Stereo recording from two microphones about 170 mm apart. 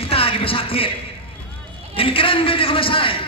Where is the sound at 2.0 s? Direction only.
30° left (ahead or behind).